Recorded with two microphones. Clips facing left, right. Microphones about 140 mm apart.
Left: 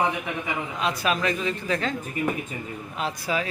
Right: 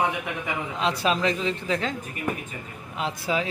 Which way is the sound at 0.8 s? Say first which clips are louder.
Right 2 dB; 25° right (ahead or behind).